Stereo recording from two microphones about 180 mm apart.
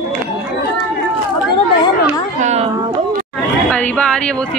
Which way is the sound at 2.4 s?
35° right (ahead or behind).